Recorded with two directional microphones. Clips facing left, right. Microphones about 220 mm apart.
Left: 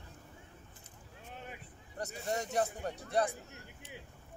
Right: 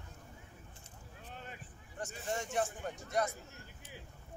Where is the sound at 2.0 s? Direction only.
40° left (ahead or behind).